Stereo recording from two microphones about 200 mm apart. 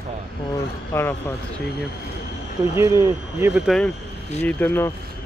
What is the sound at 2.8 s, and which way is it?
Speech, 15° right (ahead or behind).